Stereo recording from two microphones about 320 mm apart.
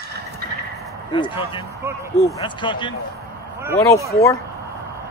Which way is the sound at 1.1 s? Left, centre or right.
Centre.